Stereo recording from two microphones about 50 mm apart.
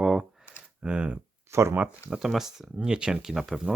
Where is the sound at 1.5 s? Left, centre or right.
Right.